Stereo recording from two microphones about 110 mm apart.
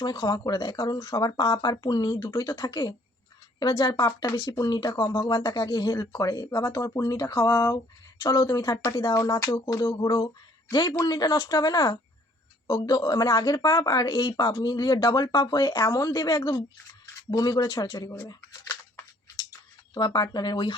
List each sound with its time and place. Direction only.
0.0 s speech: 35° left (ahead or behind)
18.3 s a sound: 30° left (ahead or behind)
19.9 s speech: 40° left (ahead or behind)